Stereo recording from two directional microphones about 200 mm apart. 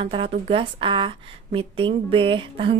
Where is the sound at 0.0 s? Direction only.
25° right (ahead or behind).